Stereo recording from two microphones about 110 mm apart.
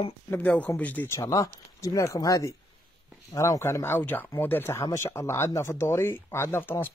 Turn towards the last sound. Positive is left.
turn(degrees=20)  # may be behind; listen again after turning